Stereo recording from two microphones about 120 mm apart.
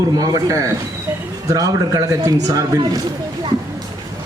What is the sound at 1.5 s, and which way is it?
Speech, 30° right (ahead or behind).